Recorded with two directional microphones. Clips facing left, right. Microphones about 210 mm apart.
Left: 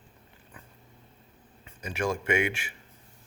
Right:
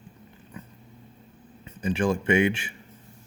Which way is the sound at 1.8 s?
30° right (ahead or behind).